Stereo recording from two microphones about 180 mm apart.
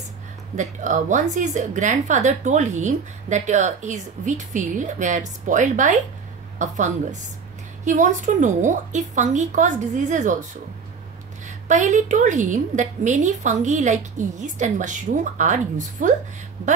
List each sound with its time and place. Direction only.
0.6 s a woman's voice: 45° right (ahead or behind)
11.4 s a woman's voice: 40° right (ahead or behind)